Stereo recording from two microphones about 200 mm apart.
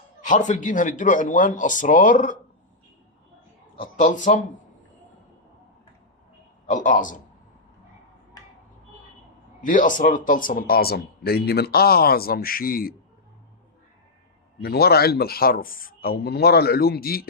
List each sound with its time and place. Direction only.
0.3 s speech: 35° left (ahead or behind)
3.9 s speech: 40° left (ahead or behind)
6.7 s speech: 40° left (ahead or behind)
9.6 s speech: 40° left (ahead or behind)
14.6 s speech: 50° left (ahead or behind)